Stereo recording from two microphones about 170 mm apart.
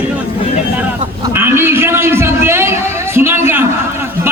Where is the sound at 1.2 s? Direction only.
15° right (ahead or behind).